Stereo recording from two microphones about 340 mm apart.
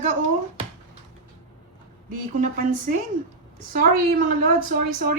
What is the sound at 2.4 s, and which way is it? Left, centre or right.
Speech, right.